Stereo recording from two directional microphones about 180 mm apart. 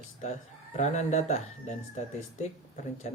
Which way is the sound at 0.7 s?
40° left (ahead or behind).